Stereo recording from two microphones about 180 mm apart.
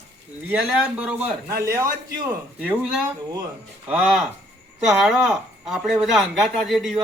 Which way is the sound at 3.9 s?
5° right (ahead or behind).